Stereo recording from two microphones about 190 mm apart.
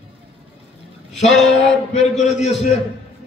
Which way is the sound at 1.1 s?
70° left (ahead or behind).